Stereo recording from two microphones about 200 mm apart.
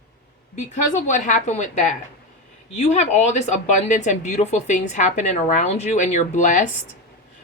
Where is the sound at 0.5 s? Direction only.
35° left (ahead or behind).